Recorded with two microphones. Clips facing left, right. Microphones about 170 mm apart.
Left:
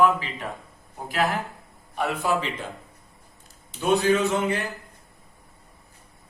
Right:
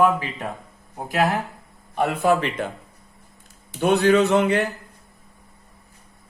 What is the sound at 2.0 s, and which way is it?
Speech, 55° right (ahead or behind).